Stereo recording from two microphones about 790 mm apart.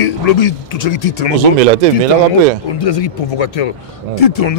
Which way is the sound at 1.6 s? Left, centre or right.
Right.